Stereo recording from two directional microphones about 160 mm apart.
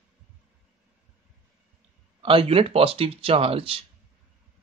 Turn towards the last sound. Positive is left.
turn(degrees=-35)  # may be behind; listen again after turning